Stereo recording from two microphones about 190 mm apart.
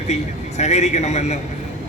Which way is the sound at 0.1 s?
35° left (ahead or behind).